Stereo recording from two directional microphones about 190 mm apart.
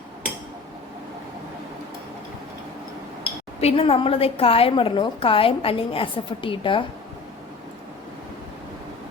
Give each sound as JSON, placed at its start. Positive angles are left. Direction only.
{"t": 3.6, "sound": "a woman's voice", "side_deg": 30}